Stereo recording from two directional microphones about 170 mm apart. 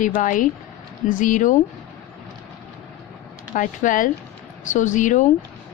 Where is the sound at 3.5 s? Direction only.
50° left (ahead or behind).